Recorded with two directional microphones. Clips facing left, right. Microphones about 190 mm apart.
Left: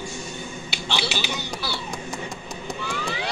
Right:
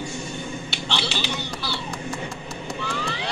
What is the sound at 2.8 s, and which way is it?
Vehicle, 5° left (ahead or behind).